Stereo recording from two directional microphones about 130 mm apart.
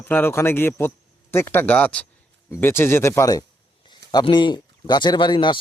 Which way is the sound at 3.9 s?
35° left (ahead or behind).